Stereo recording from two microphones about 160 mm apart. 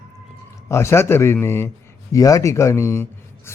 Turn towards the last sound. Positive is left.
turn(degrees=15)  # may be behind; listen again after turning